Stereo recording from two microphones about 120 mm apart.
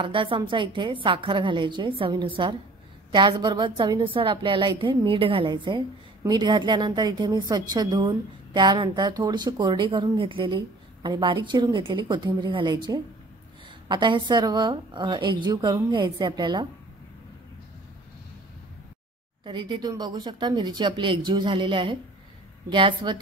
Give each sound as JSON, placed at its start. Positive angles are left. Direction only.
{"t": 0.0, "sound": "a woman's voice", "side_deg": -45}
{"t": 19.4, "sound": "a woman's voice", "side_deg": -40}